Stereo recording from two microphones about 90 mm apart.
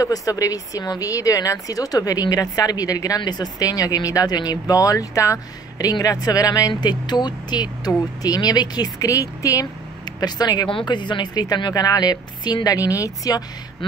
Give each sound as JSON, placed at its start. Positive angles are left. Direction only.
{"t": 0.0, "sound": "speech", "side_deg": 40}
{"t": 6.7, "sound": "speech", "side_deg": 55}
{"t": 10.7, "sound": "speech", "side_deg": 65}